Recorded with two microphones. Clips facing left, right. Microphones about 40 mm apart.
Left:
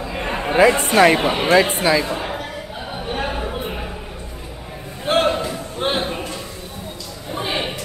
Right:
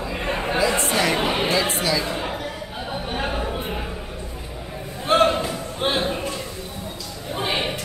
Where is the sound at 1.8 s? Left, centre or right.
Left.